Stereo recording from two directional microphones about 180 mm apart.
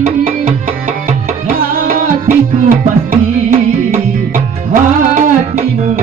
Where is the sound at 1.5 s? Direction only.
50° right (ahead or behind).